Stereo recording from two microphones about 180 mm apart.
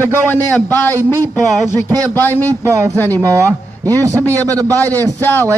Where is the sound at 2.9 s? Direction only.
10° left (ahead or behind).